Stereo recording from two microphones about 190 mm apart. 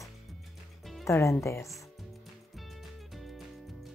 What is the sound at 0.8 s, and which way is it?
Music, centre (ahead or behind).